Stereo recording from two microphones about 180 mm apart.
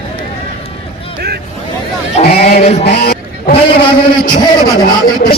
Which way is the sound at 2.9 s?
60° left (ahead or behind).